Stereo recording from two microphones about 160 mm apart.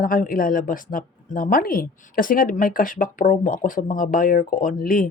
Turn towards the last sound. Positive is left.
turn(degrees=60)  # may be behind; listen again after turning